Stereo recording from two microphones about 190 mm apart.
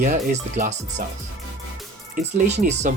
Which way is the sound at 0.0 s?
40° right (ahead or behind).